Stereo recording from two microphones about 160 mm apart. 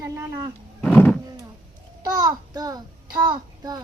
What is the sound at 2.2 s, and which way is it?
A child's voice, 25° right (ahead or behind).